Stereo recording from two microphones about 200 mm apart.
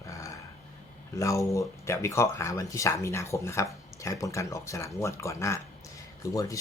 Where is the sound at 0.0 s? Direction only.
15° left (ahead or behind).